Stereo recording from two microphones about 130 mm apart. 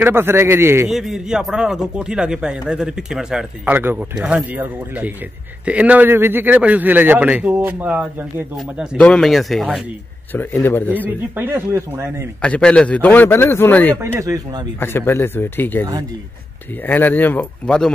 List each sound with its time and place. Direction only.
0.0 s a man's voice: 15° right (ahead or behind)
0.8 s a man's voice: 5° right (ahead or behind)
8.9 s speech: 5° left (ahead or behind)
10.3 s speech: 15° left (ahead or behind)
11.1 s a man's voice: 15° right (ahead or behind)
12.4 s speech: 10° left (ahead or behind)
14.0 s a man's voice: 25° right (ahead or behind)
14.8 s speech: 15° left (ahead or behind)
16.8 s speech: 15° left (ahead or behind)